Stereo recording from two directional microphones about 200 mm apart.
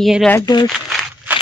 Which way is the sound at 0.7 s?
Centre (ahead or behind).